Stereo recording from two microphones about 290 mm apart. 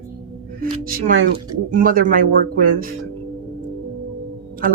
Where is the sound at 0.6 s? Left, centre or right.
Right.